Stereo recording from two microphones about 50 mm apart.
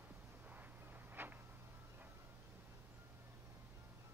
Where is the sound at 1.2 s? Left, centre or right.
Right.